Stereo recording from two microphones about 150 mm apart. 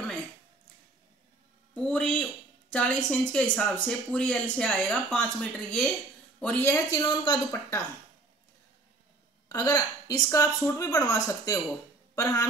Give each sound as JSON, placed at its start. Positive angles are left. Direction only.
{"t": 1.9, "sound": "speech", "side_deg": 5}
{"t": 6.9, "sound": "speech", "side_deg": 30}
{"t": 9.5, "sound": "speech", "side_deg": 25}